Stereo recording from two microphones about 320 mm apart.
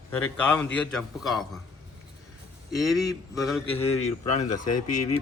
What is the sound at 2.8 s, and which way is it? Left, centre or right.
Speech, centre.